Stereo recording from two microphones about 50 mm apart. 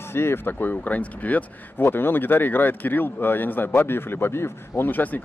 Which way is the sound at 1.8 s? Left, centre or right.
Left.